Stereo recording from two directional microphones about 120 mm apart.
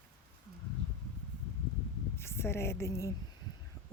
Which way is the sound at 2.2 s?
20° left (ahead or behind).